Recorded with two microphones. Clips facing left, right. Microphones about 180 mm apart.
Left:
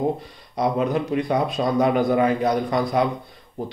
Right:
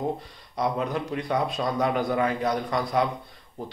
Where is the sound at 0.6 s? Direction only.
15° left (ahead or behind).